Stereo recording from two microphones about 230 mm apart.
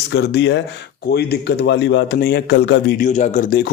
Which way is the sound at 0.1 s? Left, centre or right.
Left.